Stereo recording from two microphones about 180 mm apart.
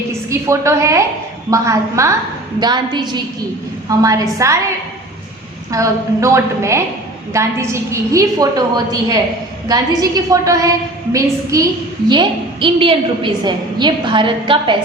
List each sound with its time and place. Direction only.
0.1 s a woman's voice: 15° right (ahead or behind)
5.7 s a woman's voice: 15° right (ahead or behind)